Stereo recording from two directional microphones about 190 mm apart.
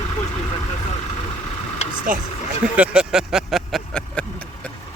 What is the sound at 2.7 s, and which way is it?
Speech, 5° right (ahead or behind).